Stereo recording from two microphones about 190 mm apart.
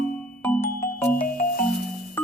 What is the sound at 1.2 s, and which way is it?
Music, 45° left (ahead or behind).